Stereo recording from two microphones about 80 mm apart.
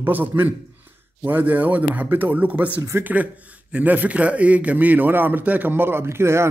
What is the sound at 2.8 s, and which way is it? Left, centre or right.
Speech, right.